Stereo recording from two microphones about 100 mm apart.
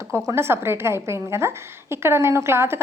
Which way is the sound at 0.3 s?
25° right (ahead or behind).